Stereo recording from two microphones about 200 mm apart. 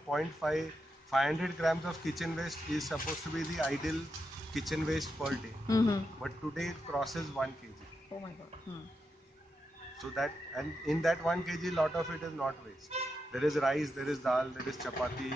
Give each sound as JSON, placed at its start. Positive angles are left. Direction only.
{"t": 0.1, "sound": "a man's voice", "side_deg": 0}
{"t": 5.7, "sound": "speech", "side_deg": 20}
{"t": 6.2, "sound": "a man's voice", "side_deg": 0}
{"t": 9.9, "sound": "a man's voice", "side_deg": 0}